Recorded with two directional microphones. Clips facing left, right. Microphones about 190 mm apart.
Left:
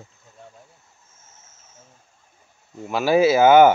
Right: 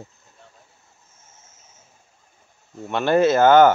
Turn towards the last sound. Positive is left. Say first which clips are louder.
# left 1 dB
turn(degrees=10)  # may be behind; listen again after turning